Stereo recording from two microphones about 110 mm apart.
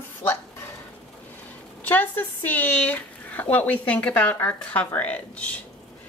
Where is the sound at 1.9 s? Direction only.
15° left (ahead or behind).